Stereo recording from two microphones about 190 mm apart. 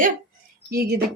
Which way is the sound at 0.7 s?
55° right (ahead or behind).